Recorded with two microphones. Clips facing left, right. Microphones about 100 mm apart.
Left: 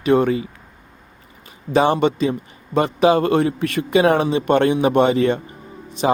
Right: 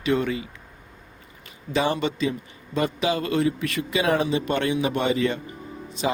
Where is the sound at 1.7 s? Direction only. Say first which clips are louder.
Left 8 dB; 45° left (ahead or behind).